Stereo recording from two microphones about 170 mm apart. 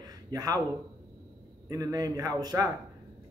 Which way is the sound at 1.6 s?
20° right (ahead or behind).